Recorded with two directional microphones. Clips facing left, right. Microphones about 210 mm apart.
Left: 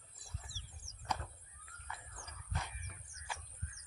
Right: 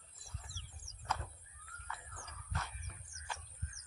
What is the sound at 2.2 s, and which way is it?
Squeal, 15° left (ahead or behind).